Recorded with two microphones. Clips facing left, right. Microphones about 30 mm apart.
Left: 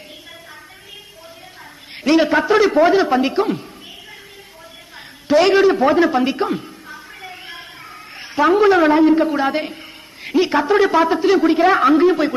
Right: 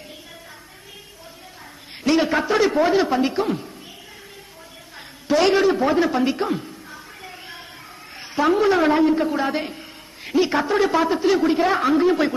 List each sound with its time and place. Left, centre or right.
2.0 s a man's voice: centre
5.3 s a man's voice: centre
7.2 s a sound: left
8.5 s a man's voice: centre
11.9 s a man's voice: centre